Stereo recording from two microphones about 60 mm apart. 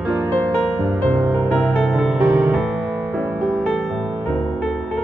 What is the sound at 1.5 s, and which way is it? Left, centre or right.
Music, centre.